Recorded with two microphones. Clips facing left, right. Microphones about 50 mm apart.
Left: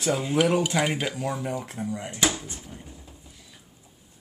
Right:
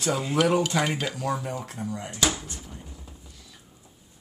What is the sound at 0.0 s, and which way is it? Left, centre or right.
Dishes, centre.